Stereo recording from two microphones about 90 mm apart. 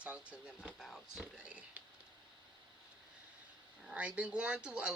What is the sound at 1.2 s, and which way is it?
Speech, 10° right (ahead or behind).